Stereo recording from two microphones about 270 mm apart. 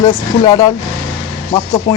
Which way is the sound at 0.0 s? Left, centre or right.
Centre.